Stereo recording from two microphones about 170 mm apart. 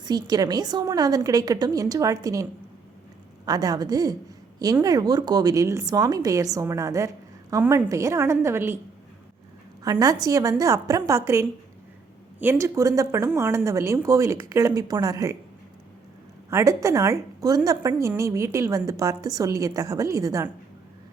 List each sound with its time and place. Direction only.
0.0 s a woman's voice: 25° right (ahead or behind)
9.8 s a woman's voice: 20° right (ahead or behind)
16.5 s a woman's voice: 15° right (ahead or behind)